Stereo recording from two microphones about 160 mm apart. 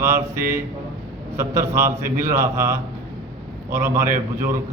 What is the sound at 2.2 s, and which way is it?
A man's voice, 15° right (ahead or behind).